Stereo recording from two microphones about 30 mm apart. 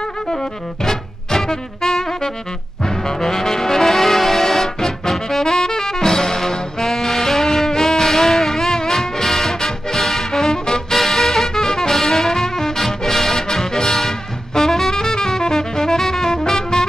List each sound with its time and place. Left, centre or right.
0.3 s music: centre
2.8 s brass instrument: centre
11.0 s music: centre